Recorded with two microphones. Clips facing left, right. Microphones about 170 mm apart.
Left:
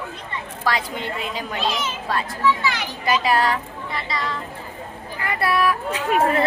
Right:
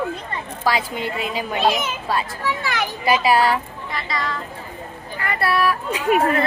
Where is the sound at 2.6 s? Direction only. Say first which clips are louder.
Even; 55° right (ahead or behind).